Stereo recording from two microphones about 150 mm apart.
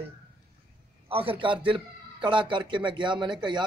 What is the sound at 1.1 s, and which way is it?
A man's voice, 35° right (ahead or behind).